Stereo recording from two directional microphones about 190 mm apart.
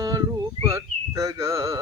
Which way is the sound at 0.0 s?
20° right (ahead or behind).